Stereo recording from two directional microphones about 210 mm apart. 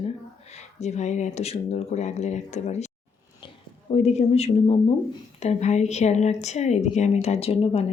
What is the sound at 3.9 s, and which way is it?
Speech, 30° left (ahead or behind).